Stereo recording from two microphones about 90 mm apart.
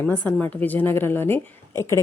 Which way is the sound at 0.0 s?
15° left (ahead or behind).